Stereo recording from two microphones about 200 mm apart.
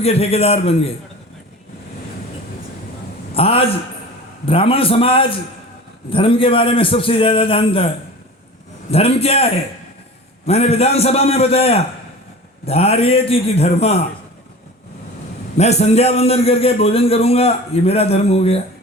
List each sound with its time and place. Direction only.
0.0 s a man's voice: 30° left (ahead or behind)
3.3 s a man's voice: 30° left (ahead or behind)
8.9 s a man's voice: 30° left (ahead or behind)
15.5 s a man's voice: 35° left (ahead or behind)